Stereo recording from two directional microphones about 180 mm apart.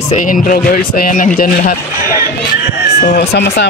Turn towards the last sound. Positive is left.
turn(degrees=65)  # may be behind; listen again after turning